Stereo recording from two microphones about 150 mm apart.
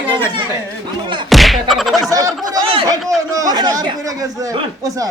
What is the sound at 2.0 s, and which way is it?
Speech, 25° right (ahead or behind).